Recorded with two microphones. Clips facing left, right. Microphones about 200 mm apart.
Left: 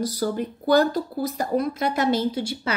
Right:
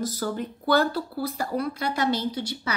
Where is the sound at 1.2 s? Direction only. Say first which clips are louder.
Left 4 dB; 20° left (ahead or behind).